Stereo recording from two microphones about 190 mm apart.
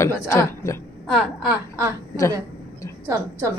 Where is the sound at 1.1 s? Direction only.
Centre (ahead or behind).